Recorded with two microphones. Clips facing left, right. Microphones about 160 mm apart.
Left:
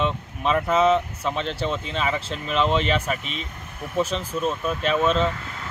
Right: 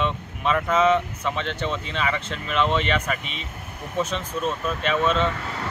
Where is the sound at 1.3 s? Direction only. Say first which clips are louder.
Left 2 dB; 35° left (ahead or behind).